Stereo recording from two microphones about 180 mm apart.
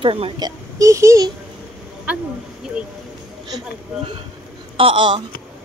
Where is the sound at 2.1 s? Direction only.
5° right (ahead or behind).